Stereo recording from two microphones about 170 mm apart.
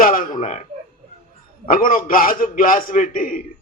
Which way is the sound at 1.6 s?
55° left (ahead or behind).